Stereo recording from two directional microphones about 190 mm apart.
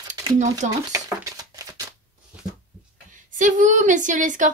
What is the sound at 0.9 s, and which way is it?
Speech, 15° right (ahead or behind).